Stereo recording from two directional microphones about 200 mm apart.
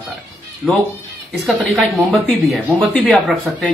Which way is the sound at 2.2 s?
Centre (ahead or behind).